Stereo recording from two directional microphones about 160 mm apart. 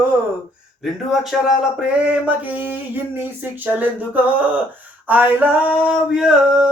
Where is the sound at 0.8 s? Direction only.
Centre (ahead or behind).